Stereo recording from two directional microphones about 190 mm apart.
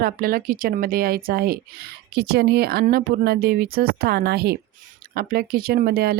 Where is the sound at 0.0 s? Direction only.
50° right (ahead or behind).